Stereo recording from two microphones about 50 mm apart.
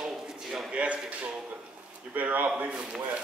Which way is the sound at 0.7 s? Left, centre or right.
Right.